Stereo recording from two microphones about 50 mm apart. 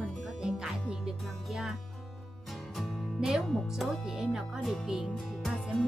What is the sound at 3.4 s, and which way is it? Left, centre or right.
Speech, centre.